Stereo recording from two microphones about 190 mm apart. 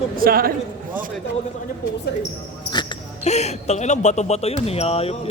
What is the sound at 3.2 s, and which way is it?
Speech, 35° left (ahead or behind).